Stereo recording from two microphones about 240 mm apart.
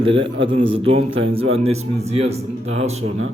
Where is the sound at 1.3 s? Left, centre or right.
Right.